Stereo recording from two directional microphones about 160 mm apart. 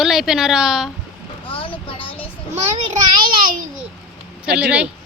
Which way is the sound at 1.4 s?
35° left (ahead or behind).